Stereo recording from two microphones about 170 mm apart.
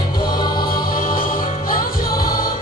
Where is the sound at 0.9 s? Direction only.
55° left (ahead or behind).